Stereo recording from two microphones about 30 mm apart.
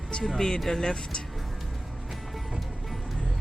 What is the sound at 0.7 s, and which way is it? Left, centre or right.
Speech, centre.